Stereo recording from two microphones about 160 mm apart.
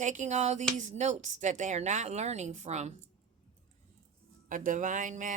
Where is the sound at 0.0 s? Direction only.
50° right (ahead or behind).